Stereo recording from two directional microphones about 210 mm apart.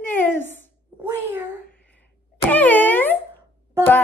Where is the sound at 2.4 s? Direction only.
10° left (ahead or behind).